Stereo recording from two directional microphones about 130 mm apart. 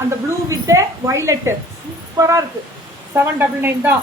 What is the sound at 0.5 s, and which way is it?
A woman's voice, 20° right (ahead or behind).